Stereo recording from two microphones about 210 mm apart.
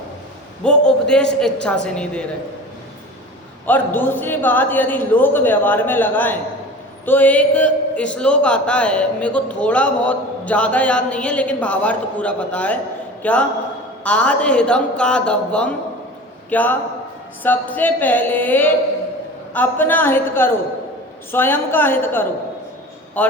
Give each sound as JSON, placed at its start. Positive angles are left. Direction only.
{"t": 0.6, "sound": "a man's voice", "side_deg": 5}
{"t": 3.7, "sound": "a man's voice", "side_deg": 10}